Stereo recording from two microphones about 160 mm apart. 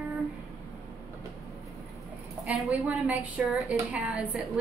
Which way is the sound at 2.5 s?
10° right (ahead or behind).